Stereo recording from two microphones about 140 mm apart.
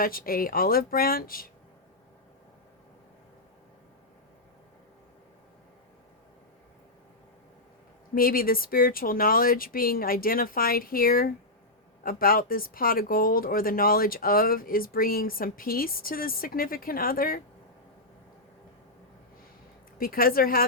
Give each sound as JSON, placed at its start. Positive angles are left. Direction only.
{"t": 0.0, "sound": "speech", "side_deg": 90}
{"t": 8.1, "sound": "speech", "side_deg": 90}
{"t": 20.0, "sound": "speech", "side_deg": 90}